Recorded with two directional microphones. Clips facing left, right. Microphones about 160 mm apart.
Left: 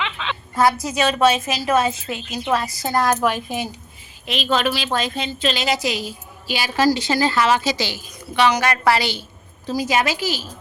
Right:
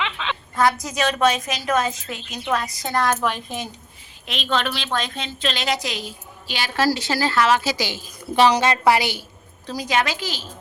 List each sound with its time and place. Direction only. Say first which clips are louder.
0.0 s a woman's voice: even; centre (ahead or behind)
8.4 s a woman's voice: right 2 dB; 35° right (ahead or behind)
8.6 s a woman's voice: right 1 dB; 20° right (ahead or behind)
9.6 s a woman's voice: left 3 dB; 5° left (ahead or behind)